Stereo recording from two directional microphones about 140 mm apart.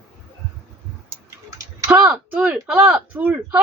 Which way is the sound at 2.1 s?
10° right (ahead or behind).